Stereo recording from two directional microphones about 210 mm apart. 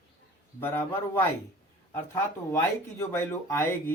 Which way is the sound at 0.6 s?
10° left (ahead or behind).